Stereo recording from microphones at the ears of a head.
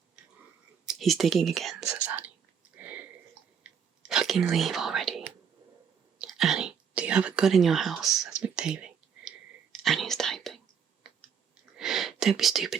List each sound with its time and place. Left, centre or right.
0.2 s whispering: right
11.0 s clicking: right